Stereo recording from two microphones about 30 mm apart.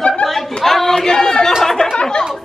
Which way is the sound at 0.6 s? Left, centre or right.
Centre.